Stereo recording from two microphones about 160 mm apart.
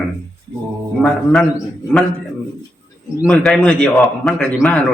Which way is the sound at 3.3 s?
5° left (ahead or behind).